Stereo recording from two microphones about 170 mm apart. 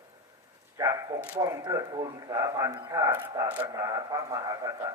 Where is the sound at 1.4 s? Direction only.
20° right (ahead or behind).